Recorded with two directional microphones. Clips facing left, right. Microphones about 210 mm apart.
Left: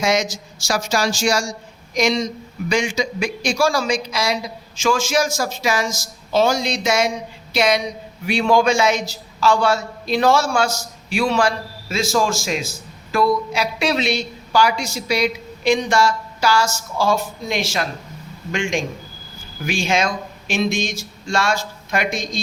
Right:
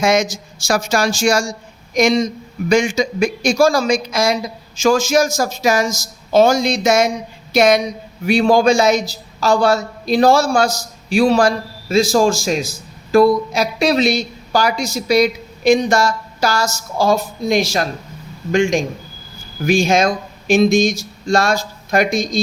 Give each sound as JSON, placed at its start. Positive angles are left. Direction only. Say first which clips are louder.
{"t": 0.0, "sound": "a man's voice", "louder": "right 4 dB", "side_deg": -50}